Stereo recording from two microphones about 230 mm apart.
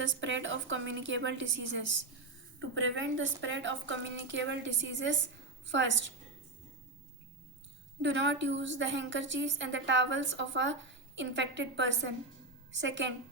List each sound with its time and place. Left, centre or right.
0.0 s a woman's voice: right
8.0 s a woman's voice: right